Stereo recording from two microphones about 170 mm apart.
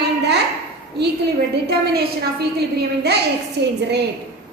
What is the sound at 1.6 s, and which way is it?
A woman's voice, 70° right (ahead or behind).